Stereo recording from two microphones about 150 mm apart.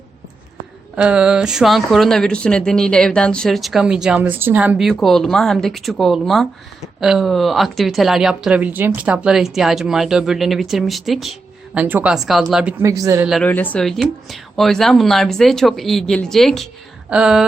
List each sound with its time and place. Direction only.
0.9 s a woman's voice: 5° right (ahead or behind)
4.9 s a woman's voice: centre (ahead or behind)
12.8 s speech: 20° right (ahead or behind)
13.4 s a woman's voice: 10° left (ahead or behind); by 17.4 s 5° right (ahead or behind)